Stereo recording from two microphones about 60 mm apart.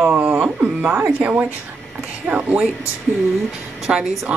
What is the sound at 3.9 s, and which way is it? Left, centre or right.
Speech, centre.